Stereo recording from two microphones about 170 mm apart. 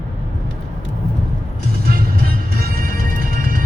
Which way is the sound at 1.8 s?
60° right (ahead or behind).